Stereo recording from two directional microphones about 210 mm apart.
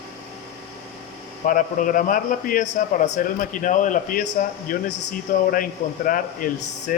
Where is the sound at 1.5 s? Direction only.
40° left (ahead or behind).